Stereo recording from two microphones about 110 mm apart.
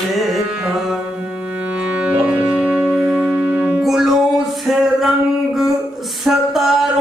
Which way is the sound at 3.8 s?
5° right (ahead or behind).